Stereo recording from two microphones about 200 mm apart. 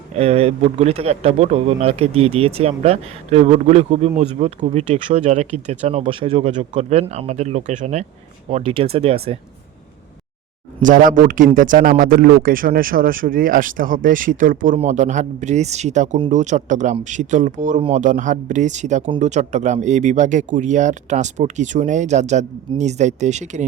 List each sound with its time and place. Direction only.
0.2 s speech: 30° right (ahead or behind)
10.8 s a man's voice: 40° right (ahead or behind)